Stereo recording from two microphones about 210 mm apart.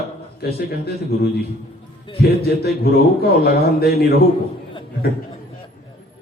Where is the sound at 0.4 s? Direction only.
50° left (ahead or behind).